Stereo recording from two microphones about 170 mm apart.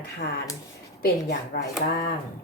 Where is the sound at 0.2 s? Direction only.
60° left (ahead or behind).